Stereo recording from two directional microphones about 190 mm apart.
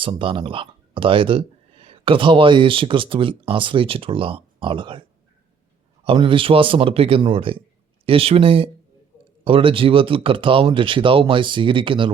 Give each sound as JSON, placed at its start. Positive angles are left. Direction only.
{"t": 0.0, "sound": "speech", "side_deg": -25}
{"t": 6.1, "sound": "speech", "side_deg": -25}